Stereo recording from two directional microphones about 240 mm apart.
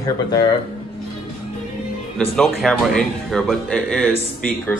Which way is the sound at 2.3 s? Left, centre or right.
Centre.